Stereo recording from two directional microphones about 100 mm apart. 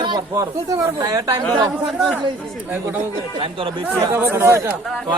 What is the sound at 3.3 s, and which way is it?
Speech, 60° right (ahead or behind).